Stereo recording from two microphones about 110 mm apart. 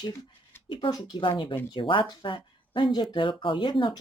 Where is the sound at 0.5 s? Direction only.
20° left (ahead or behind).